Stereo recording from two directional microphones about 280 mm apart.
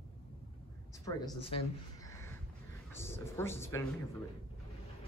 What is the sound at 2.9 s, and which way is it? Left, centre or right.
Speech, centre.